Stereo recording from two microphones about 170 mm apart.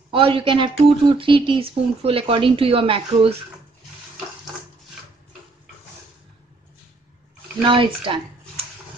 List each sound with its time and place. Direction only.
0.1 s speech: 30° right (ahead or behind)
7.6 s speech: 30° right (ahead or behind)